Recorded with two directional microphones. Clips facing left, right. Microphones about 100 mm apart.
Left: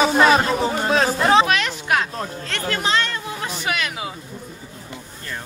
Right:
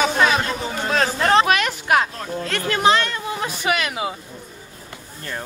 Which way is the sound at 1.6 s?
50° right (ahead or behind).